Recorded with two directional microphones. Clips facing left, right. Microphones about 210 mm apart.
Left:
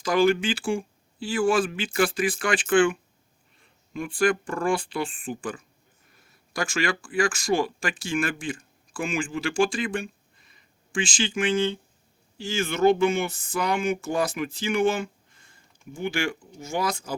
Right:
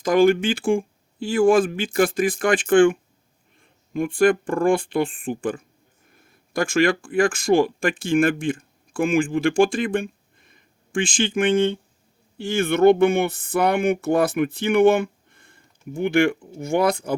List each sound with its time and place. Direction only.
0.0 s speech: 50° right (ahead or behind)